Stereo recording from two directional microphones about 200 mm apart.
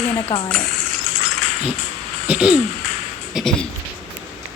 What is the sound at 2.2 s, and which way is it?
A woman's voice, 5° right (ahead or behind).